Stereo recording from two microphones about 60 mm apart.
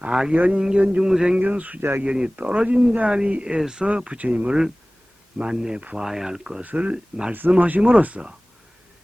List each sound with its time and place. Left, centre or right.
0.0 s speech: centre
1.4 s speech: right
6.6 s speech: right